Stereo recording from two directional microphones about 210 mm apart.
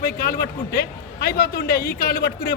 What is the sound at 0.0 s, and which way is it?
A man's voice, 45° left (ahead or behind).